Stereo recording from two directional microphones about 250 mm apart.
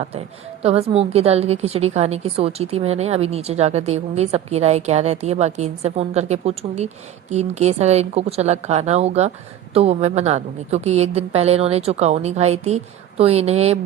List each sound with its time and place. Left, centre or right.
0.6 s a woman's voice: right